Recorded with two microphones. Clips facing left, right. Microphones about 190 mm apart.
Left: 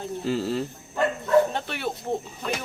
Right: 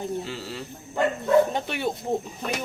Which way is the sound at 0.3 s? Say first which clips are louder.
Left 9 dB; 45° left (ahead or behind).